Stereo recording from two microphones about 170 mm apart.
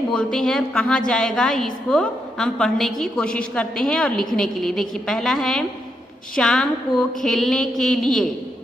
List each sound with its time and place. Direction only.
0.1 s a woman's voice: 5° left (ahead or behind)